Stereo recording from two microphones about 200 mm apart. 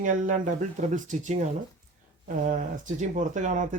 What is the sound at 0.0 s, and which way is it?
Speech, 40° right (ahead or behind).